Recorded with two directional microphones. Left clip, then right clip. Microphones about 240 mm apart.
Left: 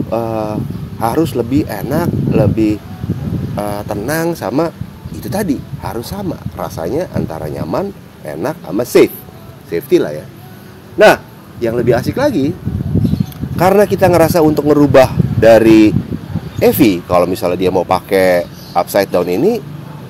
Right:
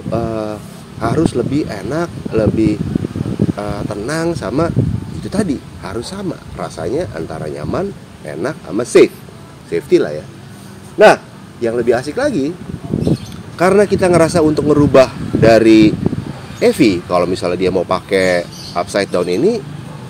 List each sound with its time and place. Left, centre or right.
0.1 s speech: left
11.0 s speech: left
13.6 s speech: left